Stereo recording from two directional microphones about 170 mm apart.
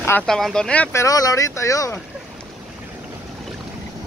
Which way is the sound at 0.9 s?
20° left (ahead or behind).